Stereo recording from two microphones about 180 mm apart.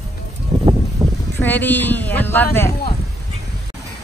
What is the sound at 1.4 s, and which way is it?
Speech, 10° left (ahead or behind).